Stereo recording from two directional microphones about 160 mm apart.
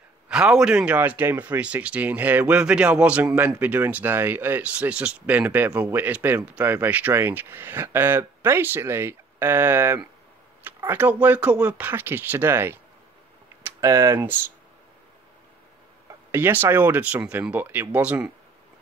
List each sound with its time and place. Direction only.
0.3 s speech: 5° right (ahead or behind)
16.3 s speech: 15° right (ahead or behind)